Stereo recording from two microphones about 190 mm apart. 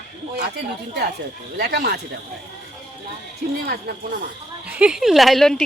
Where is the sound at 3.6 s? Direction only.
45° right (ahead or behind).